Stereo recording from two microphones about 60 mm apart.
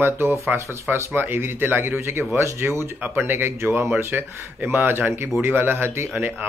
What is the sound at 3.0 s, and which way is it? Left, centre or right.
Speech, right.